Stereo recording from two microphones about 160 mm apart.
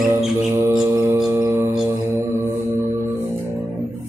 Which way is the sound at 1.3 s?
15° right (ahead or behind).